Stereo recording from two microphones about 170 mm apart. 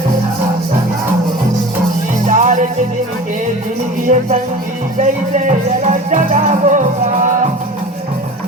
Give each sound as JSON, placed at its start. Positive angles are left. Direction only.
{"t": 2.2, "sound": "music", "side_deg": -45}
{"t": 4.0, "sound": "music", "side_deg": -45}